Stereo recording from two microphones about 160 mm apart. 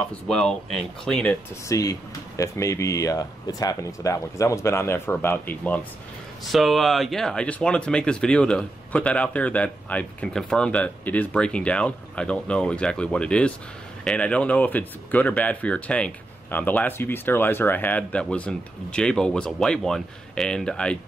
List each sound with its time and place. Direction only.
0.1 s speech: 5° left (ahead or behind)
1.7 s speech: 20° left (ahead or behind)